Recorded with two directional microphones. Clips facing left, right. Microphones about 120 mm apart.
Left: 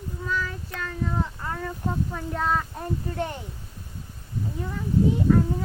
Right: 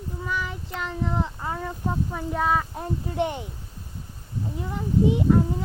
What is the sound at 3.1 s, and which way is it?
Speech, 20° right (ahead or behind).